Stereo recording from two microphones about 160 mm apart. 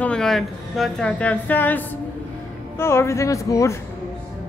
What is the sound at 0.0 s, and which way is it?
A woman's voice, 5° left (ahead or behind).